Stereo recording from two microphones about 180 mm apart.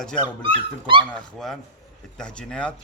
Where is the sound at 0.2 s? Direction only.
30° right (ahead or behind).